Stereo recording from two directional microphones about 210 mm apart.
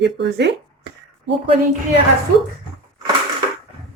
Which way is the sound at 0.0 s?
55° right (ahead or behind).